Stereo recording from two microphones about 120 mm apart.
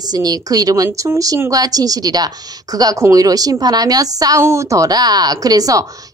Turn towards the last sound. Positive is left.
turn(degrees=-30)  # may be behind; listen again after turning